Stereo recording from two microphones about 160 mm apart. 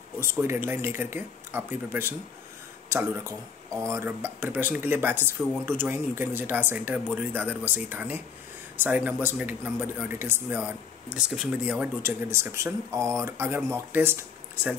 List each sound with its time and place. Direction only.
0.2 s speech: 15° right (ahead or behind)